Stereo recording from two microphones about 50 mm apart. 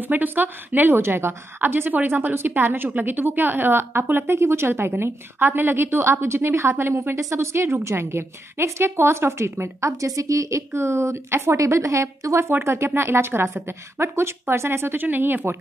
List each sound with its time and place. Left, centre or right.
0.0 s a woman's voice: right
4.4 s a woman's voice: right
12.4 s a woman's voice: right